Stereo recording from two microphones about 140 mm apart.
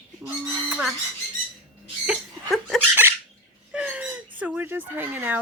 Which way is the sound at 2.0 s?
Centre (ahead or behind).